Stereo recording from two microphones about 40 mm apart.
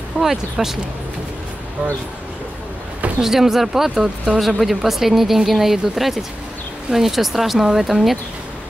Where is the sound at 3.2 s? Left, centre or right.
Centre.